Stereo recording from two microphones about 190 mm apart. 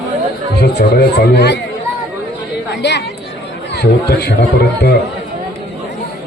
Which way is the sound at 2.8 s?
65° left (ahead or behind).